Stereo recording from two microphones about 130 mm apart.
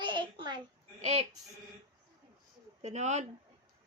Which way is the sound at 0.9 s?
55° right (ahead or behind).